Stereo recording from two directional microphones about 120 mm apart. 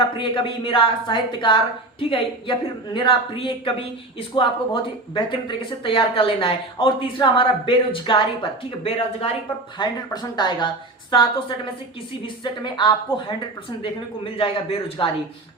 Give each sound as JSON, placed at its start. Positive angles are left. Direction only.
{"t": 0.2, "sound": "speech", "side_deg": 45}
{"t": 9.7, "sound": "a woman's voice", "side_deg": 35}
{"t": 14.3, "sound": "speech", "side_deg": 50}